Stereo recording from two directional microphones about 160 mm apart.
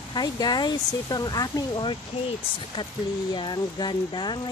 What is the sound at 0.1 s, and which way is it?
Speech, 25° left (ahead or behind).